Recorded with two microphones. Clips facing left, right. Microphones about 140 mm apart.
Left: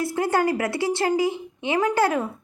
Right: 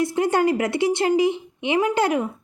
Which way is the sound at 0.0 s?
20° right (ahead or behind).